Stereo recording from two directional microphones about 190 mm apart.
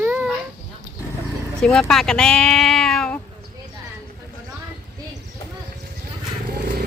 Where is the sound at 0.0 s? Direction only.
10° right (ahead or behind).